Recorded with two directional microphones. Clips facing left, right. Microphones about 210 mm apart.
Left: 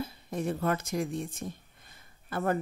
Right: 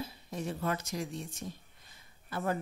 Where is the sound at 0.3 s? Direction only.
55° left (ahead or behind).